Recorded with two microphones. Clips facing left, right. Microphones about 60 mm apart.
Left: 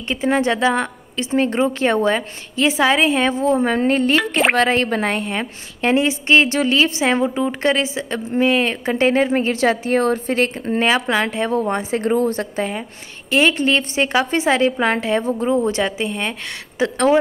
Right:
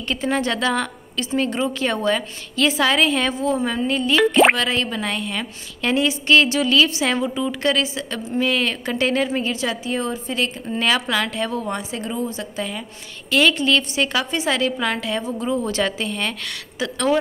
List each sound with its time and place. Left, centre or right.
0.1 s a woman's voice: left
5.1 s a woman's voice: left
9.6 s a woman's voice: left
10.8 s a woman's voice: left
12.5 s a woman's voice: left